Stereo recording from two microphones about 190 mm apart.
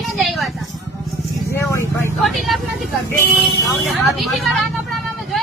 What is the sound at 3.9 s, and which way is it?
Speech, centre (ahead or behind).